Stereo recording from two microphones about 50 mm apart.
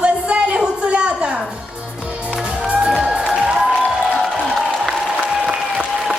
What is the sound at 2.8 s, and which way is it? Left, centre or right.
Music, centre.